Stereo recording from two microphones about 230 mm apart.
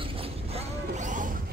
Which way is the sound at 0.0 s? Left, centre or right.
Right.